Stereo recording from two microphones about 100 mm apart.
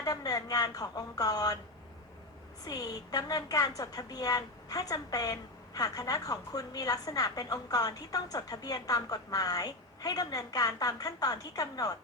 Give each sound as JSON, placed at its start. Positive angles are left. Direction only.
{"t": 0.0, "sound": "speech", "side_deg": 40}
{"t": 2.6, "sound": "speech", "side_deg": 40}